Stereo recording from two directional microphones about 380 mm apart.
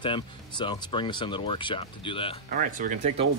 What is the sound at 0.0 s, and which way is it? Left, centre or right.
Speech, centre.